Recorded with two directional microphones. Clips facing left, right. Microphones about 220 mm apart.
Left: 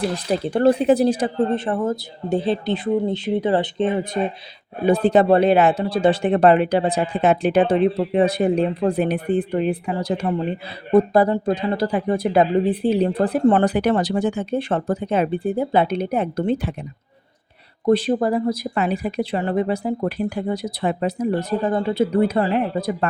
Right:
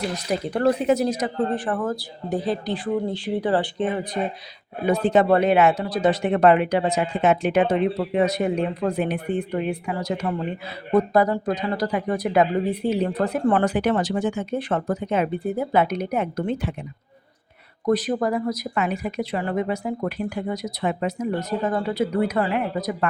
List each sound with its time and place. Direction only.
0.1 s speech: 30° left (ahead or behind)
17.8 s speech: 30° left (ahead or behind)